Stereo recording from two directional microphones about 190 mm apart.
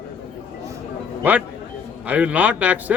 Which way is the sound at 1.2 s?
10° right (ahead or behind).